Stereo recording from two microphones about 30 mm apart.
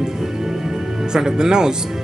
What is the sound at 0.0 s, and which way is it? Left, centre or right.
Speech, centre.